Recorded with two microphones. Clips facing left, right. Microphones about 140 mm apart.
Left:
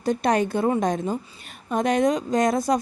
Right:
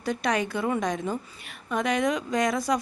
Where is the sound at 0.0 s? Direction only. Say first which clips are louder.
Left 5 dB; 50° left (ahead or behind).